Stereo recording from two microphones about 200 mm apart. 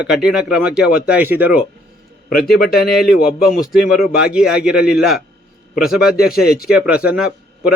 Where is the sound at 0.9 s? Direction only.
45° left (ahead or behind).